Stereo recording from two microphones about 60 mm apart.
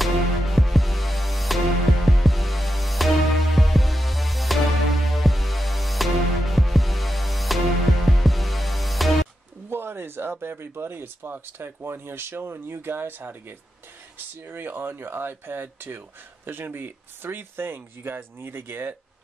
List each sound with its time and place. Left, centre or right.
0.0 s music: centre
9.7 s speech: right